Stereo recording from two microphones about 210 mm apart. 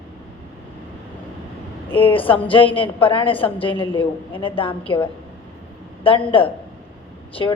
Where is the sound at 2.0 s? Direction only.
25° left (ahead or behind).